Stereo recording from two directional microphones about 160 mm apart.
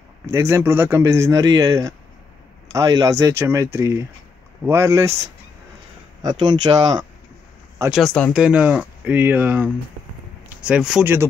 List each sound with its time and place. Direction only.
0.3 s speech: 15° right (ahead or behind)
6.2 s speech: 25° right (ahead or behind)
7.9 s speech: 5° left (ahead or behind)